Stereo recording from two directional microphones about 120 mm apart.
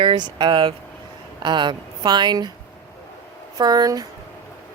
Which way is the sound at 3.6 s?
35° right (ahead or behind).